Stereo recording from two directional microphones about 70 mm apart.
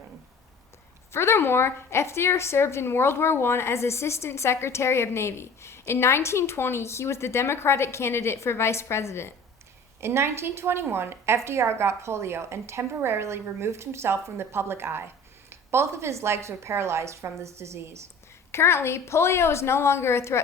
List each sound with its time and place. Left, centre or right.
1.1 s a woman's voice: left
10.0 s a woman's voice: right
18.5 s a woman's voice: left